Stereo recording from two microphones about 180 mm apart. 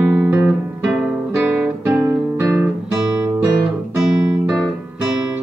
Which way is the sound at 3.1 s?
15° right (ahead or behind).